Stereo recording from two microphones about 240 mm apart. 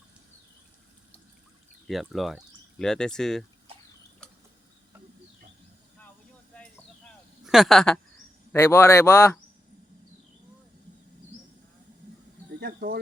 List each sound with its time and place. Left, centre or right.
1.9 s speech: centre
4.2 s mechanisms: centre
7.4 s a man's voice: centre
12.5 s speech: right